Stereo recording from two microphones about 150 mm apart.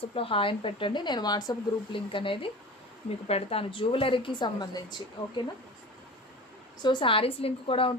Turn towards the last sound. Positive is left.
turn(degrees=35)  # may be behind; listen again after turning